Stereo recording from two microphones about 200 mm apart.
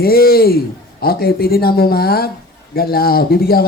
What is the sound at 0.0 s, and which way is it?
A man's voice, 50° left (ahead or behind).